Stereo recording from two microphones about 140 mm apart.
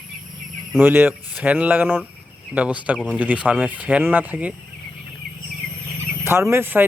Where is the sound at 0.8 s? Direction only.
15° right (ahead or behind).